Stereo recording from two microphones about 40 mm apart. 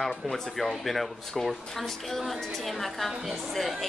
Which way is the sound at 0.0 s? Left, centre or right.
Centre.